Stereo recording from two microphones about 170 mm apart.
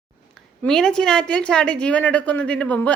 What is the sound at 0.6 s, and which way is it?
A woman's voice, 5° left (ahead or behind).